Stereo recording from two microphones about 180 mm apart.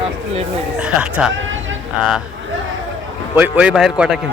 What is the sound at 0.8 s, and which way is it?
Speech, 5° right (ahead or behind).